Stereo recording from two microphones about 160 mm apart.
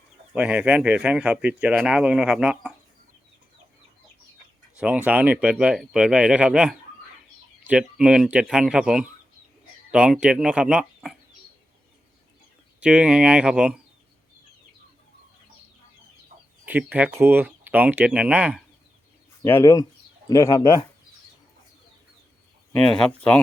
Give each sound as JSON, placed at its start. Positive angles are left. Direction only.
{"t": 0.3, "sound": "speech", "side_deg": -10}
{"t": 4.8, "sound": "speech", "side_deg": -10}
{"t": 12.8, "sound": "speech", "side_deg": -5}
{"t": 16.6, "sound": "speech", "side_deg": -10}
{"t": 19.4, "sound": "speech", "side_deg": 20}
{"t": 22.7, "sound": "speech", "side_deg": 5}